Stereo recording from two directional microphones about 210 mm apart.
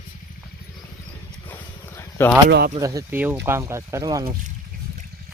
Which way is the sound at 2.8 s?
15° right (ahead or behind).